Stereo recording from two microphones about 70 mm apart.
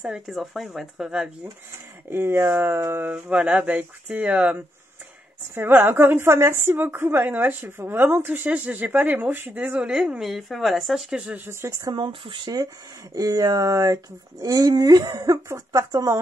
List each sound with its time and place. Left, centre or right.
0.0 s speech: centre
2.0 s a woman's voice: right; by 4.6 s centre
5.5 s a woman's voice: right; by 11.3 s centre
11.3 s a woman's voice: right
11.9 s speech: right
13.1 s speech: right